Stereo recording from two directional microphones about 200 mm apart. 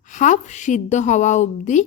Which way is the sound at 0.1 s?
40° left (ahead or behind).